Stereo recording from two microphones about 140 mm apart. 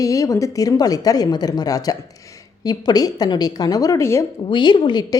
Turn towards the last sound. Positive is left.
turn(degrees=35)  # may be behind; listen again after turning